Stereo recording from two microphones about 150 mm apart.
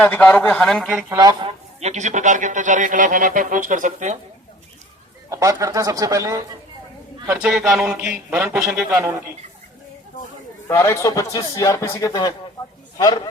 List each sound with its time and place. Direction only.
0.0 s a man's voice: 10° left (ahead or behind)
1.2 s speech: 30° right (ahead or behind)
1.8 s speech: 50° right (ahead or behind)
5.3 s speech: 20° right (ahead or behind)
7.3 s a man's voice: 5° right (ahead or behind)
8.9 s speech: 20° right (ahead or behind)
10.7 s speech: 20° left (ahead or behind)